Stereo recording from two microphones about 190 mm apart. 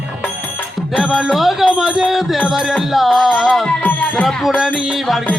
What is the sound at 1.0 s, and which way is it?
Music, 5° right (ahead or behind).